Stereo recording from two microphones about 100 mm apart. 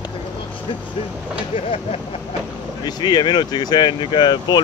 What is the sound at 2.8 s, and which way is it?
Speech, 45° left (ahead or behind).